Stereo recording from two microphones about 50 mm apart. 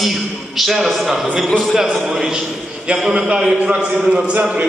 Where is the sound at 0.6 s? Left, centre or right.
Centre.